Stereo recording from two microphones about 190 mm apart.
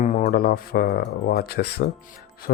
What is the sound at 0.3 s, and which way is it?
Speech, 55° left (ahead or behind).